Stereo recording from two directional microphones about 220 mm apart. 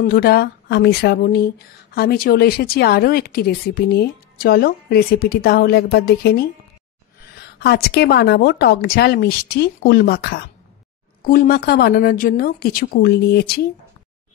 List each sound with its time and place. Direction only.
0.0 s speech: 45° left (ahead or behind)